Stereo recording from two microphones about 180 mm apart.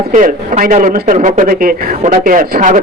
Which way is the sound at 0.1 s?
45° right (ahead or behind).